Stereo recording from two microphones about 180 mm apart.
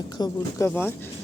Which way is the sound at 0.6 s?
10° left (ahead or behind).